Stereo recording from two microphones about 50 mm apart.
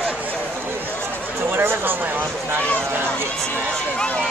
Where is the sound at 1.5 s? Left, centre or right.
Right.